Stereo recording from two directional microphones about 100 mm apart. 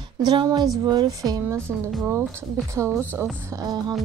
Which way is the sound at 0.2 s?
45° right (ahead or behind).